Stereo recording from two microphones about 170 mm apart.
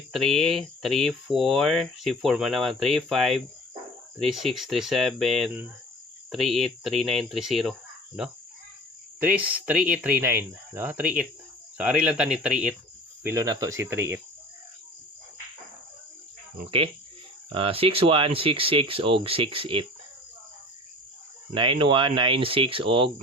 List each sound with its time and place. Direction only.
0.1 s speech: centre (ahead or behind)
13.2 s speech: 20° right (ahead or behind)
17.5 s speech: 35° right (ahead or behind)
21.5 s speech: 30° right (ahead or behind)